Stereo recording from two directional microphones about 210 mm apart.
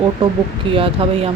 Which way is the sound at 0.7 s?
25° right (ahead or behind).